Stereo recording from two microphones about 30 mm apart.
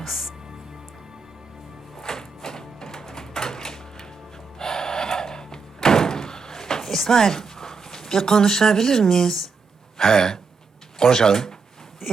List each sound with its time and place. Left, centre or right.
0.0 s speech: centre
2.0 s music: centre
4.5 s slam: centre
10.0 s speech: centre
12.0 s a sound: centre